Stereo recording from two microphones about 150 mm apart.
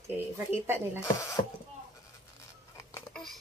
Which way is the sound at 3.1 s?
5° left (ahead or behind).